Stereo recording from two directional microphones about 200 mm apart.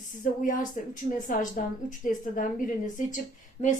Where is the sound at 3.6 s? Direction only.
40° left (ahead or behind).